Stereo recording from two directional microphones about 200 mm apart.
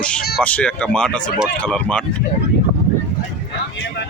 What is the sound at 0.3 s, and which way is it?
Speech, 5° left (ahead or behind).